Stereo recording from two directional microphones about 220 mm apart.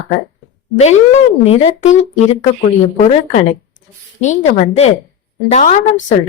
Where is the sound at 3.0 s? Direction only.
35° left (ahead or behind).